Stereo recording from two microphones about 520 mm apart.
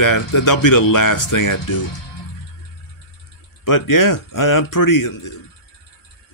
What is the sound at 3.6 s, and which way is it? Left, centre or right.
A man's voice, left.